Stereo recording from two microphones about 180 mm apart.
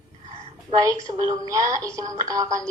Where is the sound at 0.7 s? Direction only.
20° right (ahead or behind).